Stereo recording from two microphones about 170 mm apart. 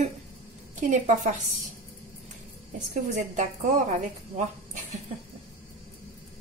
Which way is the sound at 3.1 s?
45° right (ahead or behind).